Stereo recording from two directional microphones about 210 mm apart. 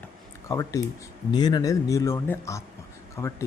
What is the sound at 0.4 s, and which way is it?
A man's voice, 15° left (ahead or behind).